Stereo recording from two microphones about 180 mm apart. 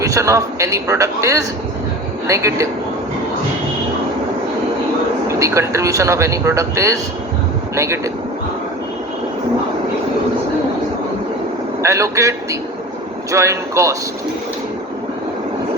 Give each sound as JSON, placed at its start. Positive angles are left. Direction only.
{"t": 0.0, "sound": "speech", "side_deg": -15}
{"t": 5.3, "sound": "speech", "side_deg": -15}
{"t": 11.8, "sound": "a man's voice", "side_deg": -15}